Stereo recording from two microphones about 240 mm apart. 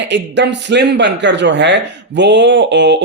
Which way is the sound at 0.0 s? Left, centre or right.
Right.